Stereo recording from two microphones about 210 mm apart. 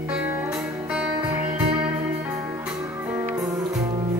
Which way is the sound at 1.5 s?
25° right (ahead or behind).